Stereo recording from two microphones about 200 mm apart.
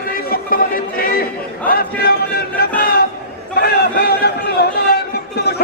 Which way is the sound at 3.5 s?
55° left (ahead or behind).